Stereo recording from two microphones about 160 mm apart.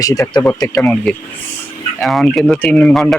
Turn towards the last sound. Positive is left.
turn(degrees=5)  # may be behind; listen again after turning